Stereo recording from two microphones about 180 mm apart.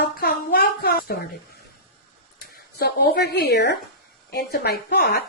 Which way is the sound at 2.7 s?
60° left (ahead or behind).